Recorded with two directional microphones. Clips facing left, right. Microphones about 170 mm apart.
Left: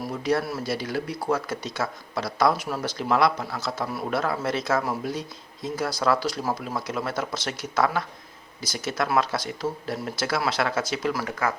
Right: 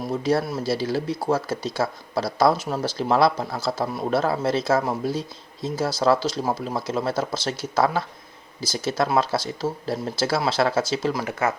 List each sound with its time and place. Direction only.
0.0 s speech: 25° right (ahead or behind)